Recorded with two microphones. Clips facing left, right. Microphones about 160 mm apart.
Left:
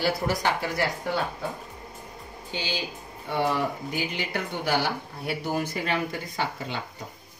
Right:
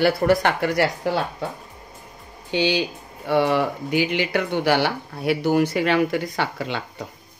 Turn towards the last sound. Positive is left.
turn(degrees=-70)  # may be behind; listen again after turning